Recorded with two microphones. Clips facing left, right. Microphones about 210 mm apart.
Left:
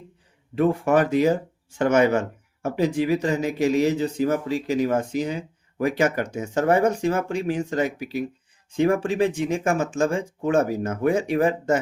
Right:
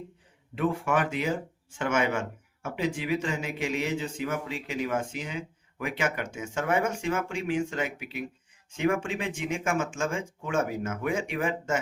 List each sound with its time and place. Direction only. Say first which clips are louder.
0.5 s speech: left 7 dB; 40° left (ahead or behind)